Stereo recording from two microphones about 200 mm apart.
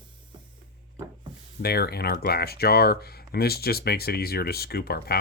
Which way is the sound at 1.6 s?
50° left (ahead or behind).